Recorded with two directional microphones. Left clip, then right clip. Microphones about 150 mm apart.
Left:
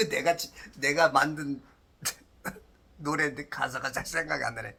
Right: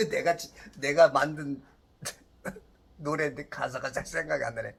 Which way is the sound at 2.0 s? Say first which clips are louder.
Left 4 dB; 5° left (ahead or behind).